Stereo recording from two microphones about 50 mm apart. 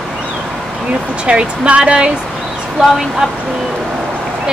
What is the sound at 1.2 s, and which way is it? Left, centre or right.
Speech, right.